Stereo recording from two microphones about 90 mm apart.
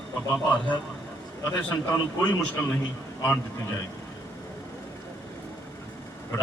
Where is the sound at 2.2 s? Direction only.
20° left (ahead or behind).